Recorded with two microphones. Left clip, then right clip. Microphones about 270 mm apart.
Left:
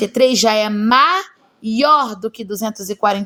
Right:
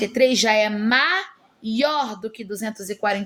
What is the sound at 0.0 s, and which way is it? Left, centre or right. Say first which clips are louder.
A woman's voice: left 5 dB; left.